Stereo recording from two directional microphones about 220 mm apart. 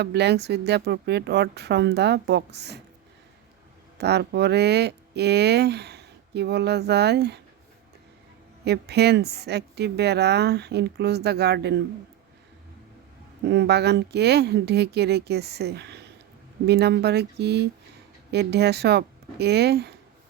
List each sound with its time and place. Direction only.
0.0 s speech: 50° right (ahead or behind)
3.9 s speech: 50° right (ahead or behind)
8.6 s speech: 50° right (ahead or behind)
13.4 s speech: 50° right (ahead or behind)